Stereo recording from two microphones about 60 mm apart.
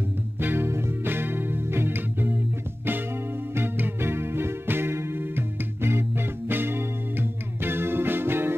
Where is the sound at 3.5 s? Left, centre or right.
Right.